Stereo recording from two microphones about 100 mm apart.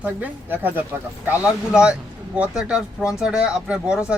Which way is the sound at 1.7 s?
10° right (ahead or behind).